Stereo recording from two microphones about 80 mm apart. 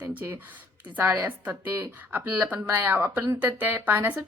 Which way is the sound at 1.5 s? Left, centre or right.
Right.